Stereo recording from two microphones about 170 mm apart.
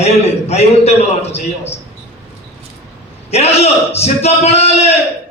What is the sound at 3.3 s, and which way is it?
A man's voice, 40° left (ahead or behind).